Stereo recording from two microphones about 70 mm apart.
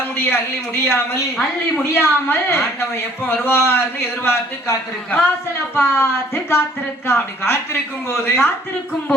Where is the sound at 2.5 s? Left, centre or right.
Left.